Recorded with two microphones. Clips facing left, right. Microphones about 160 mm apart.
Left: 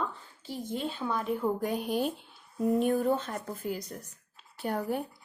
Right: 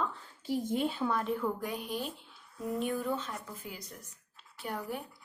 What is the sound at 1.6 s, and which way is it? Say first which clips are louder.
Speech: left 6 dB; 40° left (ahead or behind).